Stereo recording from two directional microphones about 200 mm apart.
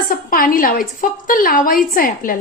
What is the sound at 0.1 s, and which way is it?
A woman's voice, 45° left (ahead or behind).